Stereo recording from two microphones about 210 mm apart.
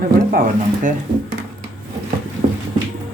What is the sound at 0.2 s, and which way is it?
Speech, 40° right (ahead or behind).